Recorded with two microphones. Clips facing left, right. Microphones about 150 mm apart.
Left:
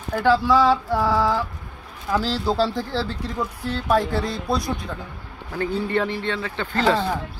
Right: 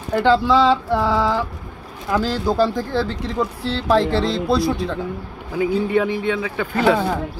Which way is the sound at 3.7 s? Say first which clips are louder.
Right 4 dB; 80° right.